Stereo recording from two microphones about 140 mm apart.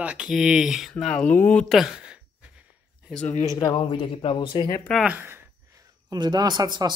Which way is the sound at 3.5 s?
25° left (ahead or behind).